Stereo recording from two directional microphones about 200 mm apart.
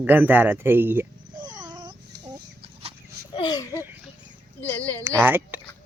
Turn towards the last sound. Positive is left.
turn(degrees=-10)  # may be behind; listen again after turning